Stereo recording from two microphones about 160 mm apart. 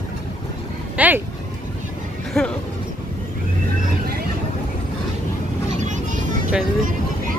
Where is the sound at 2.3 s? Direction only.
5° left (ahead or behind).